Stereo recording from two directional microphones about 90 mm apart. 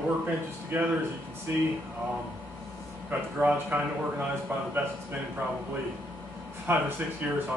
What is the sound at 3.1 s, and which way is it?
Speech, 20° right (ahead or behind).